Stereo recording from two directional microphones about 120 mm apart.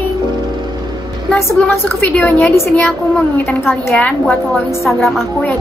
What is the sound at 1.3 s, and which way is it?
A woman's voice, 15° left (ahead or behind).